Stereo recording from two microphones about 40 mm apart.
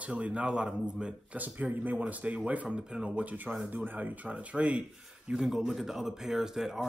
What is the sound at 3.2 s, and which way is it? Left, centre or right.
Speech, right.